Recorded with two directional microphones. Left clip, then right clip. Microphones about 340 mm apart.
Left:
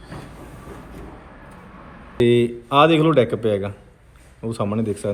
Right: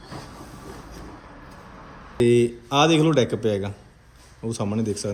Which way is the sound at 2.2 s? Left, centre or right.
Centre.